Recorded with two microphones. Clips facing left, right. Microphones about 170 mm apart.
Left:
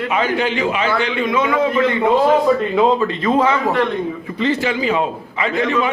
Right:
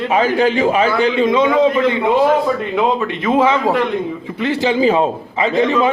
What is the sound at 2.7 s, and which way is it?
A man's voice, centre (ahead or behind).